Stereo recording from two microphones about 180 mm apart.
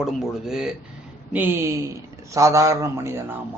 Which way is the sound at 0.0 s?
5° right (ahead or behind).